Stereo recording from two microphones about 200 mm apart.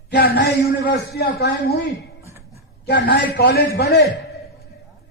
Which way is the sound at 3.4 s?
50° left (ahead or behind).